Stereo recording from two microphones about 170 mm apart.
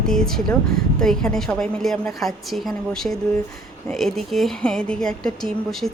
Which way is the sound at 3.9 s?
Centre (ahead or behind).